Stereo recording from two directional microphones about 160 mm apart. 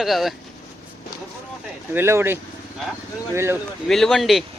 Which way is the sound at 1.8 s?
15° right (ahead or behind).